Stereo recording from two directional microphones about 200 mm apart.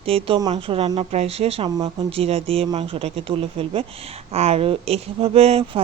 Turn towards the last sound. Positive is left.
turn(degrees=-30)  # may be behind; listen again after turning